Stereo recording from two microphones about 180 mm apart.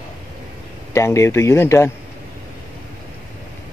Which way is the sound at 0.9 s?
15° left (ahead or behind).